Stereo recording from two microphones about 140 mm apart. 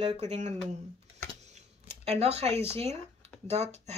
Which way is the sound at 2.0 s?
45° right (ahead or behind).